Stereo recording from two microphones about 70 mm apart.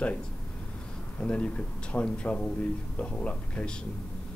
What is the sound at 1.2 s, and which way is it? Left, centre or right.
Speech, centre.